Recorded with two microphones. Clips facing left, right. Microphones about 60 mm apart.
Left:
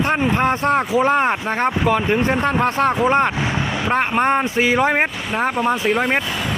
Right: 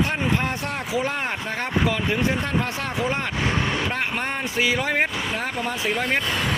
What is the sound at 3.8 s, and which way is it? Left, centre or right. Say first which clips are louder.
Speech: left 9 dB; left.